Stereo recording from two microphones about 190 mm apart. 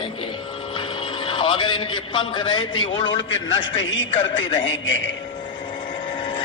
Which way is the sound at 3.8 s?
85° left.